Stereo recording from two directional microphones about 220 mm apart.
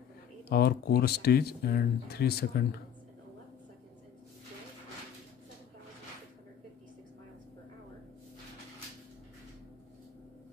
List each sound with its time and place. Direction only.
0.5 s speech: 45° left (ahead or behind)